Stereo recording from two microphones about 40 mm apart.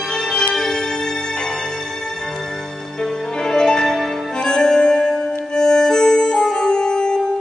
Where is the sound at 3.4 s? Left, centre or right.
Centre.